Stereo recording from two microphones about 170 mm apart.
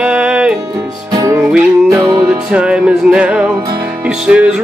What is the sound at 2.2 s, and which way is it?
Music, 5° right (ahead or behind).